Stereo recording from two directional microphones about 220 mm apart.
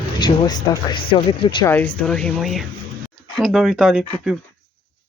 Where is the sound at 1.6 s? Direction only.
10° left (ahead or behind).